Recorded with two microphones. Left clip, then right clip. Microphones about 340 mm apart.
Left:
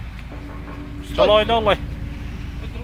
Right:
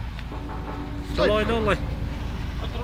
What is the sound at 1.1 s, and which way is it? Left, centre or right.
Speech, centre.